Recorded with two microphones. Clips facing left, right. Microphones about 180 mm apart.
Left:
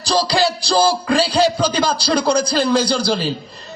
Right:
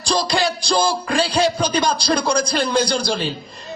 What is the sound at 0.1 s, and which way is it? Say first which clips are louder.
Music: left 3 dB; 30° left (ahead or behind).